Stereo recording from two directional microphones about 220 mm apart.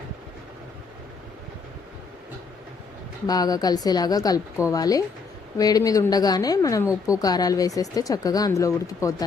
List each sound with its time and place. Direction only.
3.2 s speech: 15° left (ahead or behind)